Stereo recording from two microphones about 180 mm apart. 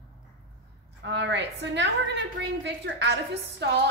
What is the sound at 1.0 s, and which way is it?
A woman's voice, 75° right (ahead or behind).